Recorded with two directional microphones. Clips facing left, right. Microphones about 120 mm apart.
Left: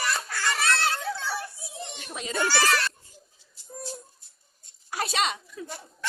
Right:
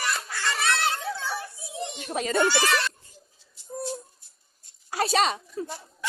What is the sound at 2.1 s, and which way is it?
Speech, 50° right (ahead or behind).